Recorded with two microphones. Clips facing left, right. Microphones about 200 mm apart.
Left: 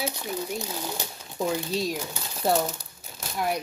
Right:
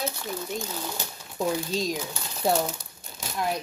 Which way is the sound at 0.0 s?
15° left (ahead or behind).